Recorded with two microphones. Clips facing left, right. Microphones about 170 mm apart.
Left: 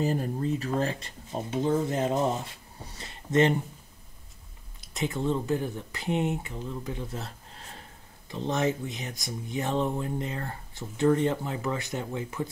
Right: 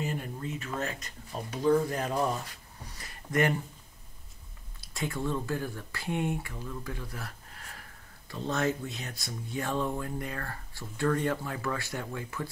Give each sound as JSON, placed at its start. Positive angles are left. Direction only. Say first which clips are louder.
{"t": 0.0, "sound": "speech", "louder": "left 7 dB", "side_deg": 35}
{"t": 4.9, "sound": "speech", "louder": "left 4 dB", "side_deg": 20}